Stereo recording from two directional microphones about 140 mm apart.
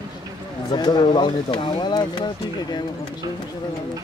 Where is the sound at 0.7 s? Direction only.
35° left (ahead or behind).